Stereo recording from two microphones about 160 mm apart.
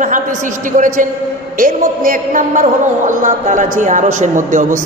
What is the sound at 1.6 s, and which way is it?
A man's voice, 60° right (ahead or behind).